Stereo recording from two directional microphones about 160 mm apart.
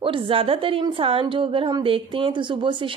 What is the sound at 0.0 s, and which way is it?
A woman's voice, 35° right (ahead or behind).